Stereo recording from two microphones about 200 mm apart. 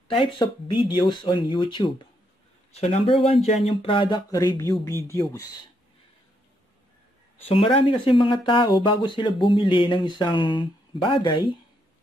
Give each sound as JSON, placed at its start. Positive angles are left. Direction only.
{"t": 0.1, "sound": "speech", "side_deg": 25}
{"t": 7.4, "sound": "speech", "side_deg": 25}